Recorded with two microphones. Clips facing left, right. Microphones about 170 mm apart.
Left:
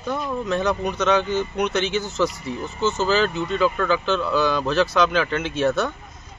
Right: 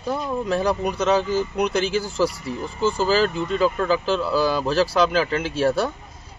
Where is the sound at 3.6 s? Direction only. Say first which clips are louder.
Even; 35° right (ahead or behind).